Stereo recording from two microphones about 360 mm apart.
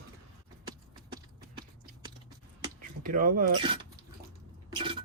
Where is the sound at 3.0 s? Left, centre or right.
Right.